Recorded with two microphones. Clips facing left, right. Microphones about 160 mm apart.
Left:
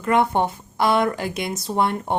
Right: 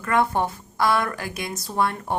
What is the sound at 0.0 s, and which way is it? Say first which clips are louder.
A woman's voice: left 3 dB; 20° left (ahead or behind).